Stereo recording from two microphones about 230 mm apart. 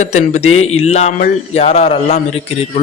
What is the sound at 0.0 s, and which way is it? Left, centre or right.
Speech, left.